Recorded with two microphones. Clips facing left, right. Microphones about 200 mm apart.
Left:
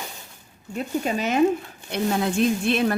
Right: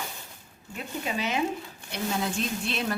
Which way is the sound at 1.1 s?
50° left (ahead or behind).